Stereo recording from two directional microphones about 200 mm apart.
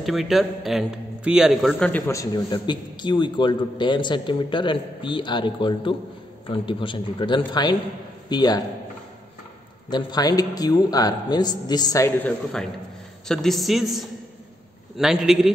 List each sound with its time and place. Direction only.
0.0 s a man's voice: centre (ahead or behind); by 8.6 s 20° left (ahead or behind)
9.8 s a man's voice: 20° left (ahead or behind); by 15.5 s centre (ahead or behind)